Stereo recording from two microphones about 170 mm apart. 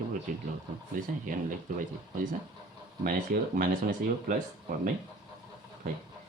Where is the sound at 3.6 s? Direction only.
55° right (ahead or behind).